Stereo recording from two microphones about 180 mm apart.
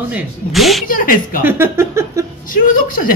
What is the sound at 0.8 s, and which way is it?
Speech, 50° left (ahead or behind).